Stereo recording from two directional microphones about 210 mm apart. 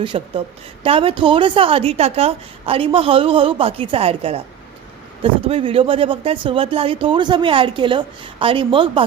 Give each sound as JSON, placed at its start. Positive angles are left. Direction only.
{"t": 0.0, "sound": "speech", "side_deg": -25}